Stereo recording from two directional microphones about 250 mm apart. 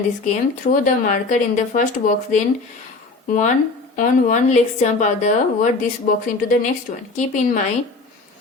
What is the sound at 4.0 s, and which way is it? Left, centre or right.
A woman's voice, left.